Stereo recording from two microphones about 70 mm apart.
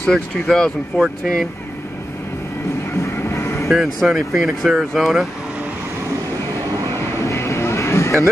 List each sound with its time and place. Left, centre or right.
0.0 s speech: centre
3.0 s music: left
3.6 s speech: centre
7.2 s vehicle: left